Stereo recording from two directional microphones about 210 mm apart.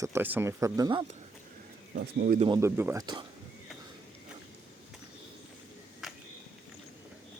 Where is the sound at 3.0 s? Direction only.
20° right (ahead or behind).